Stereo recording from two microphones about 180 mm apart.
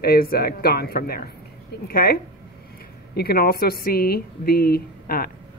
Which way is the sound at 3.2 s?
60° left (ahead or behind).